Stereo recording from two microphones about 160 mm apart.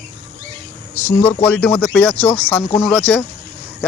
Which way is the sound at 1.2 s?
10° left (ahead or behind).